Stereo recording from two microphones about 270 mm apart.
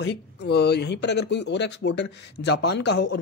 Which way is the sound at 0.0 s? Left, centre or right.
Left.